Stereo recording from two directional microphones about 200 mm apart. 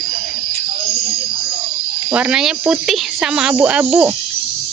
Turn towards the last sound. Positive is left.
turn(degrees=-10)  # may be behind; listen again after turning